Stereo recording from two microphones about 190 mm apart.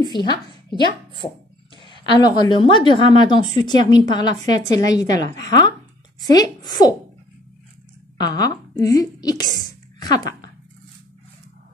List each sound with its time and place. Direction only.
0.0 s a woman's voice: 25° left (ahead or behind)
8.2 s a woman's voice: 20° left (ahead or behind)
9.6 s a sound: 20° left (ahead or behind)